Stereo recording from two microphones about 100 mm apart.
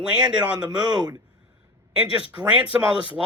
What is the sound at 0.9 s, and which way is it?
Speech, 45° right (ahead or behind).